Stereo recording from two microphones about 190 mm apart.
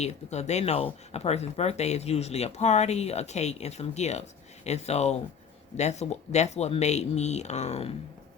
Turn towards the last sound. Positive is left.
turn(degrees=35)  # may be behind; listen again after turning